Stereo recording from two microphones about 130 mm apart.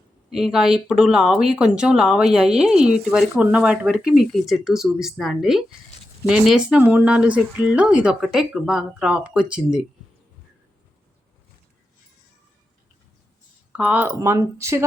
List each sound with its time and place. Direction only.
0.3 s speech: 5° right (ahead or behind)
13.7 s speech: 10° right (ahead or behind)
14.2 s speech: 20° right (ahead or behind)